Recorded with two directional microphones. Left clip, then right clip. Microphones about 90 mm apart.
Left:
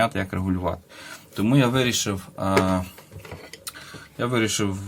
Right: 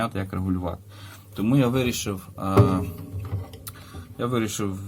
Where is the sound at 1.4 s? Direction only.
25° right (ahead or behind).